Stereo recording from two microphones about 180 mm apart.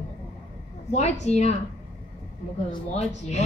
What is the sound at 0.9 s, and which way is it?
Speech, 40° left (ahead or behind).